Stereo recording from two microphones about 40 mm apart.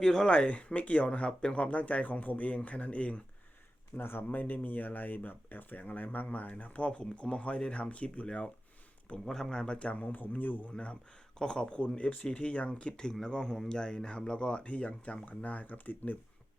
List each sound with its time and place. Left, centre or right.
0.0 s speech: centre
0.3 s speech: left
3.9 s speech: left
4.3 s speech: left
9.1 s speech: centre
9.7 s speech: left
10.2 s speech: left
11.3 s speech: centre; by 16.1 s left